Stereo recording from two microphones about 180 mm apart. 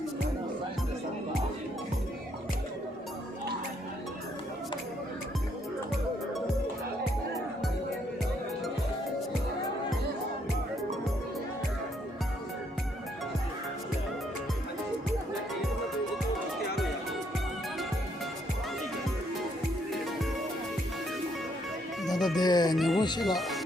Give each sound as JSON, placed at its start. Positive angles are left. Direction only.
{"t": 22.0, "sound": "music", "side_deg": 0}
{"t": 22.4, "sound": "speech", "side_deg": 20}
{"t": 22.7, "sound": "speech", "side_deg": 0}
{"t": 23.0, "sound": "speech", "side_deg": 25}
{"t": 23.2, "sound": "speech", "side_deg": 0}